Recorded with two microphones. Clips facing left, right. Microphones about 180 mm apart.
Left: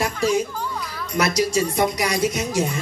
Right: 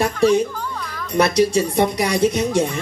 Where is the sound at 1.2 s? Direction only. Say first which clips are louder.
Right 4 dB; 30° right (ahead or behind).